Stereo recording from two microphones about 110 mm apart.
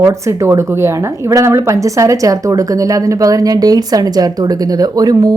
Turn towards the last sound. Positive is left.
turn(degrees=-35)  # may be behind; listen again after turning